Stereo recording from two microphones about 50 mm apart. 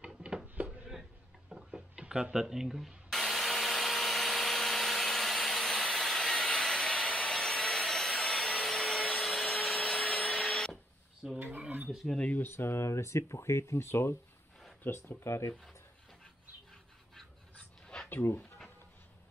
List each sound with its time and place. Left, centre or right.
0.0 s a sound: centre
2.5 s speech: centre
3.1 s tools: centre
11.3 s a sound: right
12.3 s speech: left
12.5 s speech: left
14.8 s speech: left
17.6 s dog: centre
18.1 s speech: left